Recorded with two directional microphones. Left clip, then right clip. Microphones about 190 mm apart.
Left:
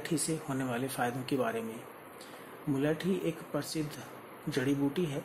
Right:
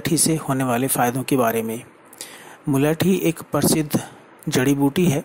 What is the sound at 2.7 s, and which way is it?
Speech, 40° right (ahead or behind).